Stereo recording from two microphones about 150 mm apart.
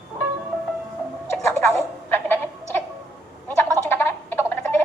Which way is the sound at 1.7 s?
15° left (ahead or behind).